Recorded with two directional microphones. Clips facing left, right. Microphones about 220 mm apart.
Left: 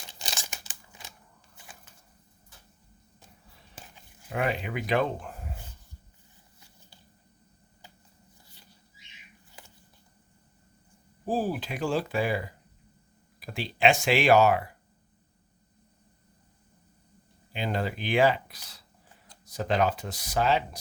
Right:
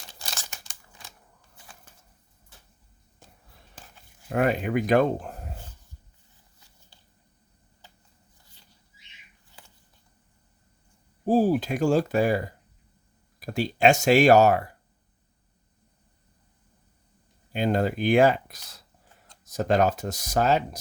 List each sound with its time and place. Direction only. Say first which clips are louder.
0.2 s crumpling: left 1 dB; 15° left (ahead or behind)
4.3 s speech: right 6 dB; 45° right (ahead or behind)
11.3 s speech: right 8 dB; 45° right (ahead or behind)
17.5 s speech: right 7 dB; 45° right (ahead or behind)